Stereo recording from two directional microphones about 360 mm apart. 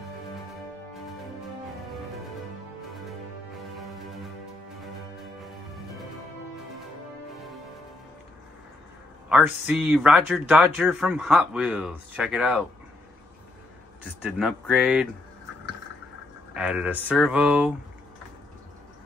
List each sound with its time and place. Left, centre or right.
3.7 s music: centre
9.3 s speech: centre
14.2 s speech: centre
16.5 s speech: centre